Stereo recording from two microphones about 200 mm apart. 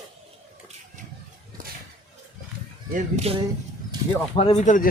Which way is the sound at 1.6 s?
45° right (ahead or behind).